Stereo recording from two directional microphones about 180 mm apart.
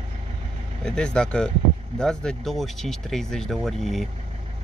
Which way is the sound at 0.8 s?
5° left (ahead or behind).